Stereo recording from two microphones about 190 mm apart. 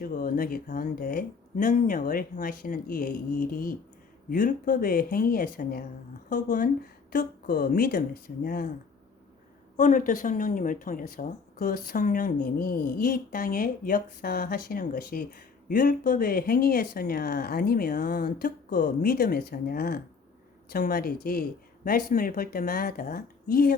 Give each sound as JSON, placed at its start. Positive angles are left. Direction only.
{"t": 0.0, "sound": "speech", "side_deg": 50}
{"t": 9.7, "sound": "speech", "side_deg": 40}